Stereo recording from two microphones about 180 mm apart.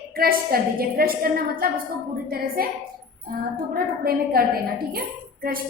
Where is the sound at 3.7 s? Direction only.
55° right (ahead or behind).